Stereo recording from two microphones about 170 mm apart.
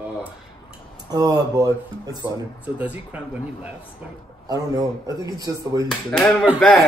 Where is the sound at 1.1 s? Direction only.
25° right (ahead or behind).